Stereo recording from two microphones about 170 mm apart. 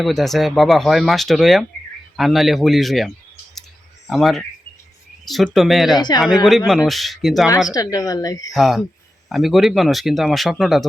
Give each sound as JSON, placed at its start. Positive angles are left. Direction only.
{"t": 0.0, "sound": "speech", "side_deg": 0}
{"t": 4.1, "sound": "speech", "side_deg": 0}
{"t": 6.0, "sound": "speech", "side_deg": 25}
{"t": 6.7, "sound": "speech", "side_deg": 0}
{"t": 7.7, "sound": "speech", "side_deg": 20}
{"t": 8.5, "sound": "speech", "side_deg": 0}